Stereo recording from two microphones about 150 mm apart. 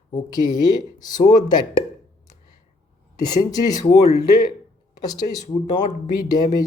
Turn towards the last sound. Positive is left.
turn(degrees=25)  # may be behind; listen again after turning